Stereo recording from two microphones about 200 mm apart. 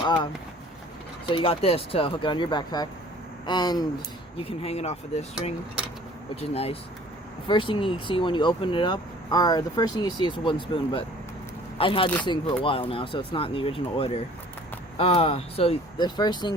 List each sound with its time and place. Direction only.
0.0 s speech: 20° left (ahead or behind)
1.3 s speech: 25° left (ahead or behind)
4.4 s speech: 30° left (ahead or behind)
6.3 s speech: 30° left (ahead or behind)
11.8 s speech: 25° left (ahead or behind)